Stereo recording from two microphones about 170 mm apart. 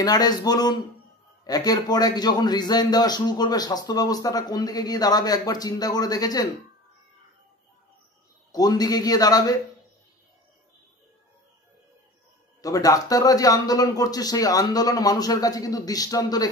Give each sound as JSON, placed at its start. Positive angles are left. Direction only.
{"t": 0.0, "sound": "a man's voice", "side_deg": 25}
{"t": 8.5, "sound": "a man's voice", "side_deg": 20}
{"t": 12.6, "sound": "a man's voice", "side_deg": 20}